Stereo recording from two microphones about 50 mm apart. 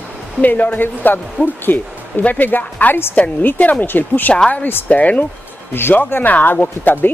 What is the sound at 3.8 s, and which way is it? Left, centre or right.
Speech, left.